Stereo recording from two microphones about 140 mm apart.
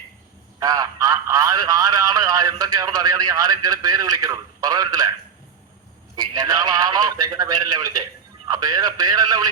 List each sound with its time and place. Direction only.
0.6 s a man's voice: 25° right (ahead or behind)
6.1 s a man's voice: 25° right (ahead or behind)